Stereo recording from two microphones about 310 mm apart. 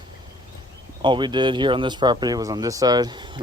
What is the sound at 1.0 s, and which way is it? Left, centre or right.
Speech, centre.